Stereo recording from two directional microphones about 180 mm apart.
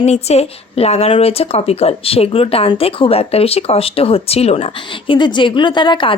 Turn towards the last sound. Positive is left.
turn(degrees=25)  # may be behind; listen again after turning